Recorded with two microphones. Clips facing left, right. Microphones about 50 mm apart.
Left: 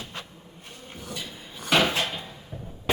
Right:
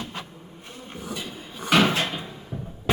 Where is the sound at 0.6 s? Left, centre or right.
Centre.